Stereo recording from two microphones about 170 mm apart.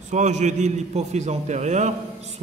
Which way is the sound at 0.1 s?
45° right (ahead or behind).